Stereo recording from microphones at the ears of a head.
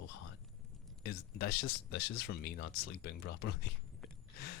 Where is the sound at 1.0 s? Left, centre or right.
Left.